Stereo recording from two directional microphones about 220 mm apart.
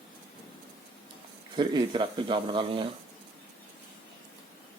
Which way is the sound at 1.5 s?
20° right (ahead or behind).